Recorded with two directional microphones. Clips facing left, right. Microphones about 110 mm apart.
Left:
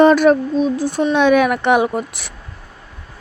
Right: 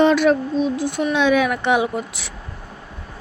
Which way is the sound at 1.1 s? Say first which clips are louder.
Left 4 dB; 55° left (ahead or behind).